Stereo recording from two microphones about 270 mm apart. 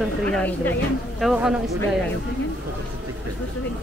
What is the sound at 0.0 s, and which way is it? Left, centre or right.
A woman's voice, centre.